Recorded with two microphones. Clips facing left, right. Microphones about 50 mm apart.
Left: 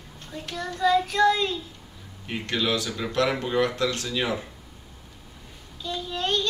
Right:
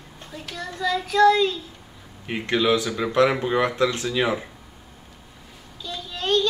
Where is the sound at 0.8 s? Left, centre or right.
Centre.